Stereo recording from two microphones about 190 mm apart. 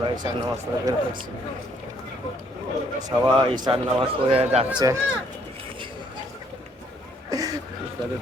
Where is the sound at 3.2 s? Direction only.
25° right (ahead or behind).